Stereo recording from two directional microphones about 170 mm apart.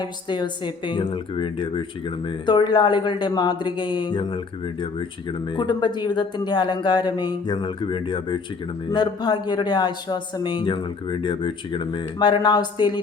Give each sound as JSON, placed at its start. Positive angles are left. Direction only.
{"t": 0.0, "sound": "speech", "side_deg": 25}
{"t": 5.5, "sound": "speech", "side_deg": 25}